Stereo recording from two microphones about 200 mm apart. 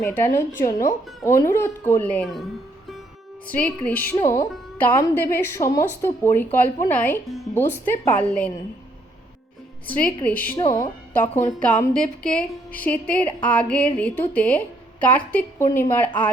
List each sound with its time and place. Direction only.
0.0 s speech: 10° left (ahead or behind)
3.5 s speech: 5° left (ahead or behind)
10.2 s speech: 10° left (ahead or behind)